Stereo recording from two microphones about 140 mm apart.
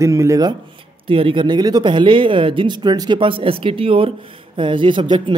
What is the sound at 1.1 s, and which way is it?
Speech, 40° right (ahead or behind).